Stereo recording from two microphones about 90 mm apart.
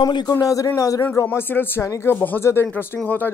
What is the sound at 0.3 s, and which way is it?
Speech, 40° left (ahead or behind).